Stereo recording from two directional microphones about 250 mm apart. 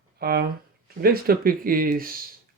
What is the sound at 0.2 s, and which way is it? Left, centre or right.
Speech, right.